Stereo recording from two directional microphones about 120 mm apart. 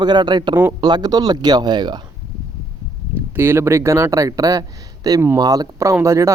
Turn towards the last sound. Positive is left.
turn(degrees=-25)  # may be behind; listen again after turning